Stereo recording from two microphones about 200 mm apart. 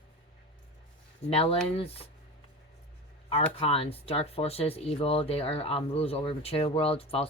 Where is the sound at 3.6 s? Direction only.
30° left (ahead or behind).